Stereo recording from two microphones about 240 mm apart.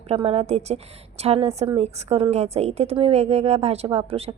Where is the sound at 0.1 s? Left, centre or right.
Right.